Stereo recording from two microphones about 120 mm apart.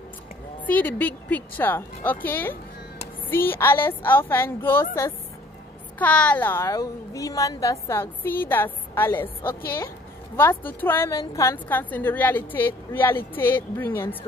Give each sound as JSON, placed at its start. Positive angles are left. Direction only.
{"t": 0.7, "sound": "a woman's voice", "side_deg": 15}
{"t": 6.7, "sound": "a woman's voice", "side_deg": 30}
{"t": 11.1, "sound": "a woman's voice", "side_deg": 30}
{"t": 11.5, "sound": "a woman's voice", "side_deg": 15}